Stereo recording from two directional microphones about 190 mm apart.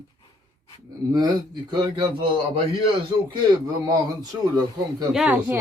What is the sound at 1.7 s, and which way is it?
A man's voice, 25° right (ahead or behind).